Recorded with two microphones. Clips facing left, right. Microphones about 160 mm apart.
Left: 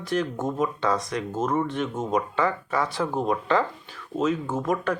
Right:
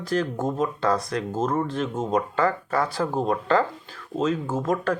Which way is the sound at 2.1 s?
50° right (ahead or behind).